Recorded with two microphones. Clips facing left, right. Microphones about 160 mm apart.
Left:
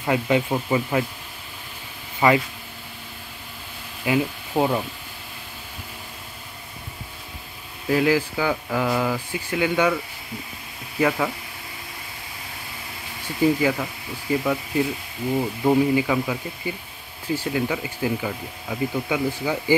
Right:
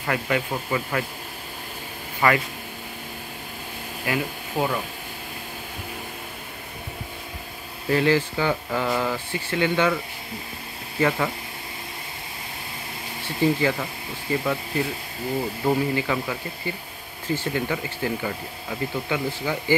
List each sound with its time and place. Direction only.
0.0 s speech: 15° left (ahead or behind)
2.2 s speech: 15° left (ahead or behind)
4.0 s speech: 20° left (ahead or behind)
7.9 s speech: 5° left (ahead or behind)
11.0 s speech: 5° left (ahead or behind)
13.4 s speech: 10° left (ahead or behind)
15.6 s speech: 15° left (ahead or behind)